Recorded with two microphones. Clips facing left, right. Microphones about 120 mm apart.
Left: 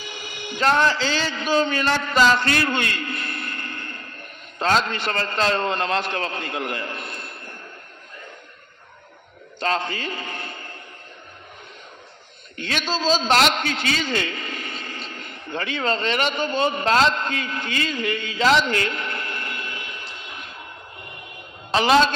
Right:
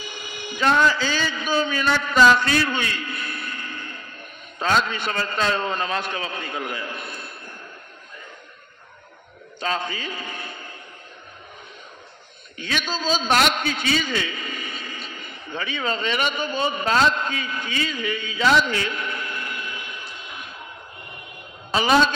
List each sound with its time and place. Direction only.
0.7 s a man's voice: 55° left (ahead or behind)
9.8 s a man's voice: 60° left (ahead or behind)
12.5 s a man's voice: 55° left (ahead or behind)